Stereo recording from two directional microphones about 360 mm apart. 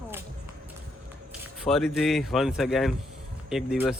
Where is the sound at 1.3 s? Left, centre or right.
Centre.